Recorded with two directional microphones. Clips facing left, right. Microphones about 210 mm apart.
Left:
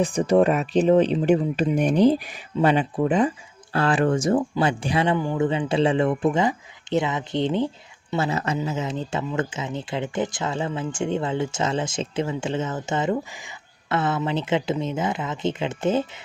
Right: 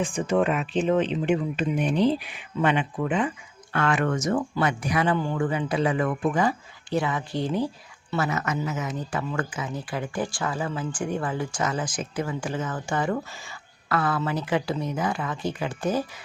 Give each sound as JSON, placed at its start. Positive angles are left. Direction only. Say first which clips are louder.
{"t": 0.0, "sound": "speech", "louder": "left 5 dB", "side_deg": 35}
{"t": 5.1, "sound": "speech", "louder": "left 3 dB", "side_deg": 15}